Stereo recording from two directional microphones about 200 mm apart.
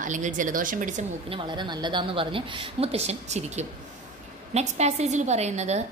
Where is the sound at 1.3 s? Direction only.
25° right (ahead or behind).